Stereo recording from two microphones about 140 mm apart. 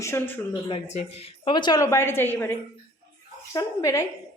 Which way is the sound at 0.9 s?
50° left (ahead or behind).